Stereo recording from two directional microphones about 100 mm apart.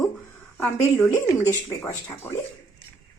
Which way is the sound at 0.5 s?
15° left (ahead or behind).